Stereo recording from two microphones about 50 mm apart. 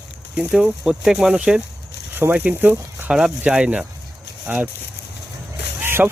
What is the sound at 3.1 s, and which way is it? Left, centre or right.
Speech, centre.